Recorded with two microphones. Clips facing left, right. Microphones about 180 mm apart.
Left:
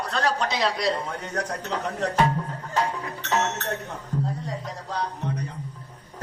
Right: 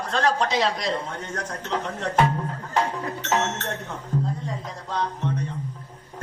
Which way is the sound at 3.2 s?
35° left (ahead or behind).